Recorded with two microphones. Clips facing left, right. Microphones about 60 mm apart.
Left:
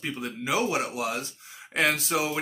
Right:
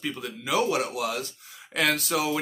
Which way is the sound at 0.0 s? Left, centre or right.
Left.